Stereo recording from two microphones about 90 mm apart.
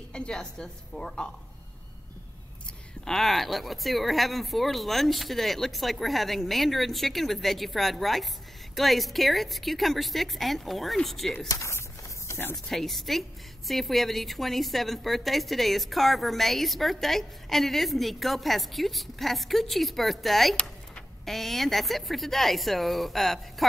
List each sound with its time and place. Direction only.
0.1 s a woman's voice: 10° left (ahead or behind)
3.1 s a woman's voice: 5° left (ahead or behind)
11.4 s a sound: 35° left (ahead or behind)
12.6 s a woman's voice: centre (ahead or behind)